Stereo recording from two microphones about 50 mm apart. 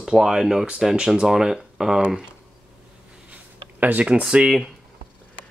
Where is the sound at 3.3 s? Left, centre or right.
Right.